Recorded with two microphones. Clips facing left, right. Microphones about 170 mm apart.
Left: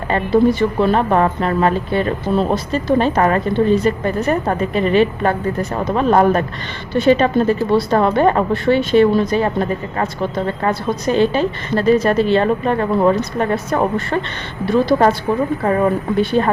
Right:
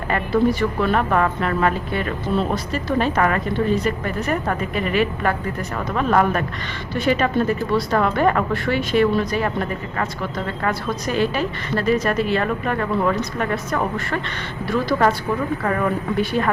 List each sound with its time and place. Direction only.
0.8 s speech: 30° left (ahead or behind)